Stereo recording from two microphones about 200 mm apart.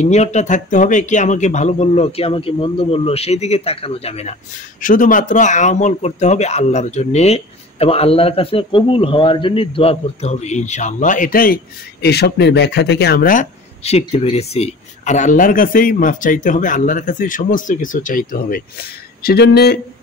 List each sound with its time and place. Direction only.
0.0 s speech: 35° left (ahead or behind)
4.8 s speech: 40° left (ahead or behind)